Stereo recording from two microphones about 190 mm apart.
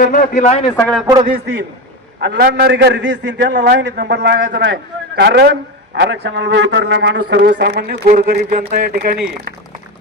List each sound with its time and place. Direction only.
0.0 s a man's voice: 45° left (ahead or behind)
0.8 s a man's voice: 5° left (ahead or behind)
2.2 s a man's voice: 55° right (ahead or behind)
8.0 s speech: 40° right (ahead or behind); by 9.2 s 55° right (ahead or behind)